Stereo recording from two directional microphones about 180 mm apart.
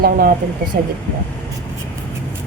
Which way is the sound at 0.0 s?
55° right (ahead or behind).